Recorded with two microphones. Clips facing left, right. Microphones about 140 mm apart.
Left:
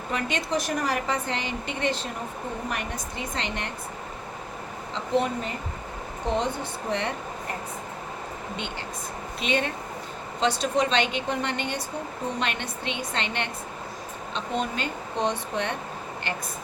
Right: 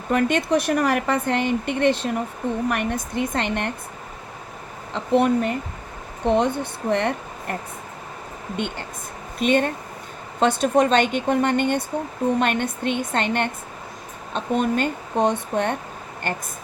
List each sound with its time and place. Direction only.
0.1 s speech: 55° right (ahead or behind)
4.9 s speech: 60° right (ahead or behind)
9.4 s speech: 50° right (ahead or behind)